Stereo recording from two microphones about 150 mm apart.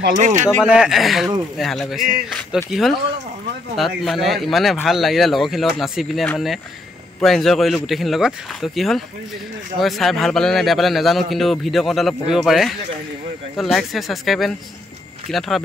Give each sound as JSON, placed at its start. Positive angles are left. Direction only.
{"t": 0.1, "sound": "speech", "side_deg": -55}
{"t": 0.7, "sound": "a man's voice", "side_deg": -5}